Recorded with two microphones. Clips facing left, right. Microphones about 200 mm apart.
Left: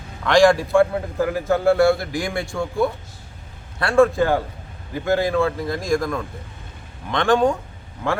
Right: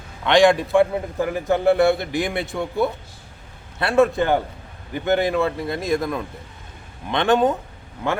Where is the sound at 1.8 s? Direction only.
Centre (ahead or behind).